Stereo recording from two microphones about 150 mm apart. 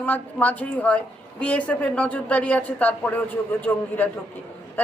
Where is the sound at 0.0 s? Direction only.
10° left (ahead or behind).